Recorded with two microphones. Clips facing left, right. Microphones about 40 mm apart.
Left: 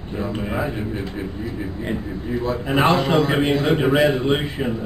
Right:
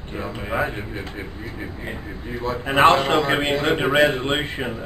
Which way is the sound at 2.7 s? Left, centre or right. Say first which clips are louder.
Right 3 dB; right.